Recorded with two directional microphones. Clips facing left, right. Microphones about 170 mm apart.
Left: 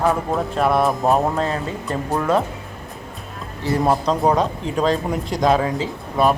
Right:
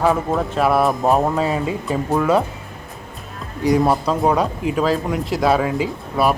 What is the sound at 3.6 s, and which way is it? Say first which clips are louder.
Speech: right 2 dB; 15° right (ahead or behind).